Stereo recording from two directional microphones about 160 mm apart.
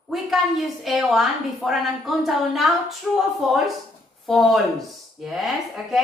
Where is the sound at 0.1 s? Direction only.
Centre (ahead or behind).